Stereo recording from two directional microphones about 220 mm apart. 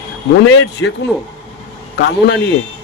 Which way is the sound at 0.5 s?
50° left (ahead or behind).